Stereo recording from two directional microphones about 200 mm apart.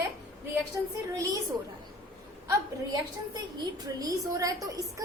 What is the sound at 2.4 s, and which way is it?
A woman's voice, 20° right (ahead or behind).